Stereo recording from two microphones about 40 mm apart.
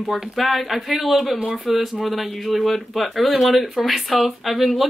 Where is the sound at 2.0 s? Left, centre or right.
Centre.